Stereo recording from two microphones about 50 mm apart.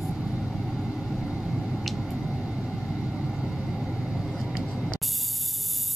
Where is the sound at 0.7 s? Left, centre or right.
Centre.